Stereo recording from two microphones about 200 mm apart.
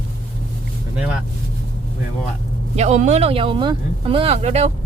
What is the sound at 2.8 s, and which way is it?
Speech, 35° right (ahead or behind).